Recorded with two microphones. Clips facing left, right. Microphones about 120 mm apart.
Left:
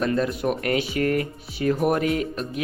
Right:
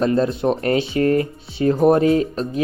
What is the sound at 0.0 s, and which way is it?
Speech, 30° right (ahead or behind).